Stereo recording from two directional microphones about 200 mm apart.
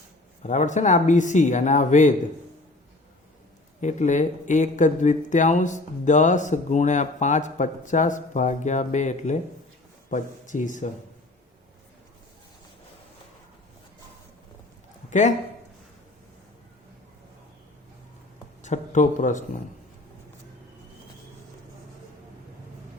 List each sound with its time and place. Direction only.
0.4 s speech: 40° left (ahead or behind)
3.8 s speech: 35° left (ahead or behind)
18.6 s speech: 40° left (ahead or behind)